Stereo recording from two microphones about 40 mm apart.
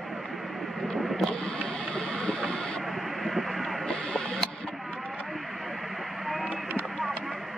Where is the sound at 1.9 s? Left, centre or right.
Centre.